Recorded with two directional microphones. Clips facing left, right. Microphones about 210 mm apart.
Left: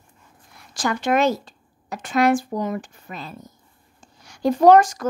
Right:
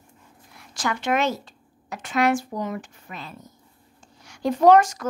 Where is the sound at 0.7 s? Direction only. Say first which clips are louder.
Left 3 dB; 35° left (ahead or behind).